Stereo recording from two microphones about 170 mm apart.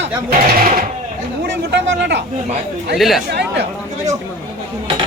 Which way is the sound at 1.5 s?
90° right.